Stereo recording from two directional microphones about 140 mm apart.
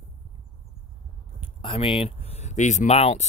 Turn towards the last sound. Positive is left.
turn(degrees=50)  # may be behind; listen again after turning